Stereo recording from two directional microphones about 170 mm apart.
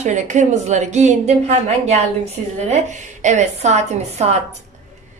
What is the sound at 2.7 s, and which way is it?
A woman's voice, 45° right (ahead or behind).